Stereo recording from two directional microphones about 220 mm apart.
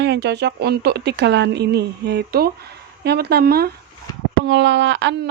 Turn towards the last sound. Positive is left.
turn(degrees=-55)  # may be behind; listen again after turning